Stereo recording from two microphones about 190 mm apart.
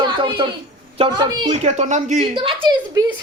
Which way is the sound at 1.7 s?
35° right (ahead or behind).